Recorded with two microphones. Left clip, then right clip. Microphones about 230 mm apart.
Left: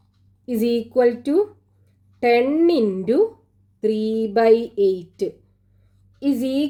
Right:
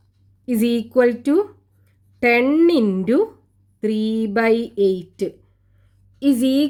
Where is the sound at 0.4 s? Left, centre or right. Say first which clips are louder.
Even; right.